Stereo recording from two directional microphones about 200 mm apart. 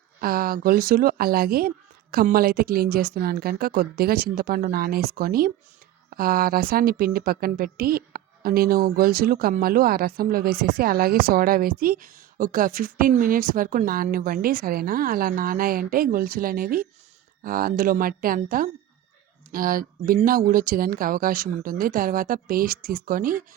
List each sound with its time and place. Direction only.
0.2 s a woman's voice: 45° right (ahead or behind)